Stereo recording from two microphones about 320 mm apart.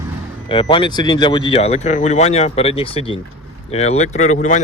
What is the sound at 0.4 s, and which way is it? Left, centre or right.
Speech, centre.